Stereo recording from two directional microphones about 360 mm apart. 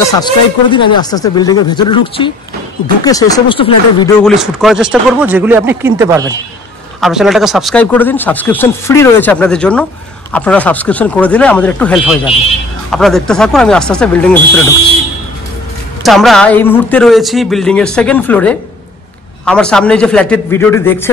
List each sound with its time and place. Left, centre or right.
0.1 s speech: centre
4.2 s speech: centre
16.0 s speech: centre